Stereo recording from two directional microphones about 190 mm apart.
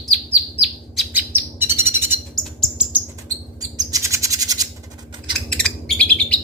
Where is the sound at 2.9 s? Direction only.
15° right (ahead or behind).